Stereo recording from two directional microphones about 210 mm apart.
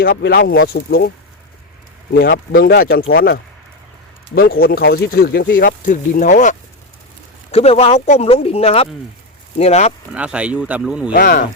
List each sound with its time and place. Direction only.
0.0 s speech: 45° left (ahead or behind)
2.1 s speech: 50° left (ahead or behind); by 9.9 s 30° left (ahead or behind)
10.1 s speech: 5° right (ahead or behind)
11.1 s speech: 40° left (ahead or behind)